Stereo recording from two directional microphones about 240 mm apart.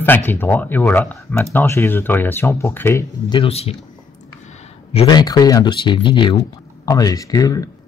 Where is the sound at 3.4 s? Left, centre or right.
Left.